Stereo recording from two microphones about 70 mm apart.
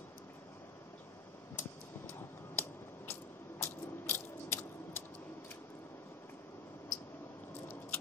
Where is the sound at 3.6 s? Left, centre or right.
Left.